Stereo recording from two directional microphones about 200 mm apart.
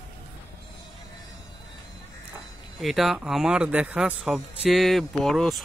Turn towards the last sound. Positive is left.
turn(degrees=0)  # may be behind; listen again after turning